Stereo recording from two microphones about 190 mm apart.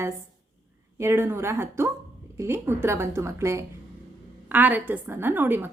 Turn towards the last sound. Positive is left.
turn(degrees=-10)  # may be behind; listen again after turning